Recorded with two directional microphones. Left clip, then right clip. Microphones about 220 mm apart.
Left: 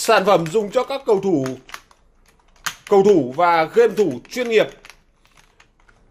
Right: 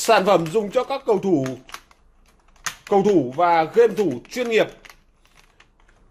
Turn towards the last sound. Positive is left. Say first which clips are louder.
# left 2 dB
turn(degrees=0)  # may be behind; listen again after turning